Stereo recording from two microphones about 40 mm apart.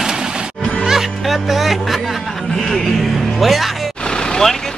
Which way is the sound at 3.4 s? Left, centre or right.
Centre.